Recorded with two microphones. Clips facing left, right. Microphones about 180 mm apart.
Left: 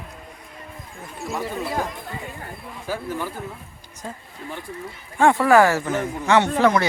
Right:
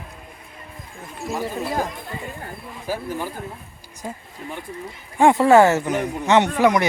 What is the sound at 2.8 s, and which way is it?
Speech, 15° right (ahead or behind).